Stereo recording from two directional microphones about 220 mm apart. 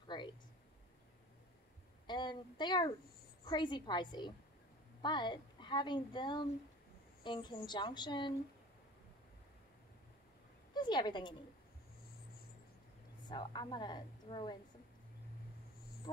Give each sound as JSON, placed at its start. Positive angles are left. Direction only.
{"t": 0.1, "sound": "a sound", "side_deg": 20}
{"t": 2.0, "sound": "a woman's voice", "side_deg": 20}
{"t": 10.7, "sound": "a woman's voice", "side_deg": 20}
{"t": 13.3, "sound": "a woman's voice", "side_deg": 20}